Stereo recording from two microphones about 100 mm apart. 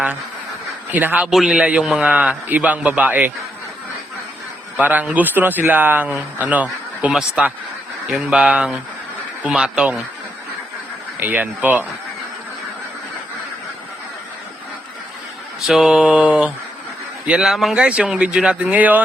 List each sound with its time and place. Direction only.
0.9 s a man's voice: 15° right (ahead or behind)
1.3 s speech: 5° right (ahead or behind)
4.8 s speech: 15° right (ahead or behind)
11.2 s speech: 15° right (ahead or behind)
15.6 s a man's voice: 5° right (ahead or behind)